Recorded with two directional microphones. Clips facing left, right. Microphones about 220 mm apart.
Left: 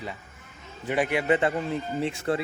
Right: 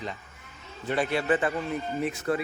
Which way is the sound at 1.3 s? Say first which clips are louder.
Left 2 dB; 25° left (ahead or behind).